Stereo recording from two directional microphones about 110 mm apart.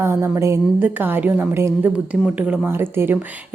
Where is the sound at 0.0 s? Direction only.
20° right (ahead or behind).